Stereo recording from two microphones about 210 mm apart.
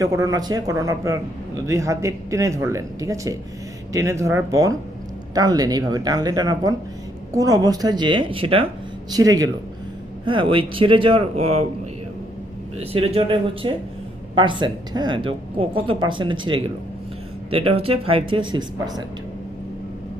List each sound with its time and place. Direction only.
0.0 s a man's voice: 15° right (ahead or behind)
12.8 s speech: 30° right (ahead or behind)